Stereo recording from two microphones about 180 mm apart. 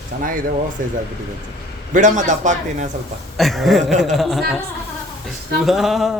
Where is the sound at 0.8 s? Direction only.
50° right (ahead or behind).